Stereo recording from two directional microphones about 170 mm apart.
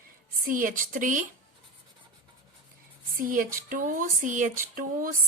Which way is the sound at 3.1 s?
55° right (ahead or behind).